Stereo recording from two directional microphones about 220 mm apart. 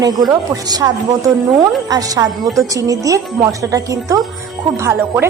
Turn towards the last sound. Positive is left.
turn(degrees=-10)  # may be behind; listen again after turning